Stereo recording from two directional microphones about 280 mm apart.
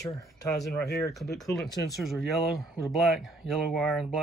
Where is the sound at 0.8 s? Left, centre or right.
Left.